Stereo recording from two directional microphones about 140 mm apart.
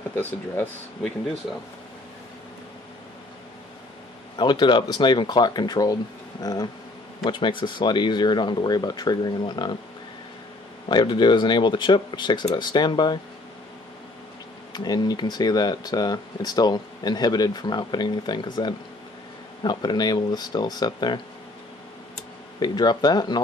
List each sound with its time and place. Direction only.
0.1 s speech: 15° left (ahead or behind)
4.4 s speech: 35° left (ahead or behind)
10.9 s speech: 35° left (ahead or behind)
14.7 s speech: 30° left (ahead or behind)
22.6 s speech: 30° left (ahead or behind)